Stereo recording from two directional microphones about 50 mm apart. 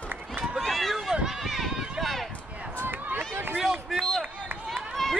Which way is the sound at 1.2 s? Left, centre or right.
Centre.